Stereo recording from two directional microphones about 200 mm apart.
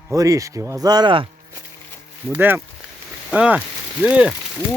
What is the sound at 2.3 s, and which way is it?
Speech, 10° right (ahead or behind).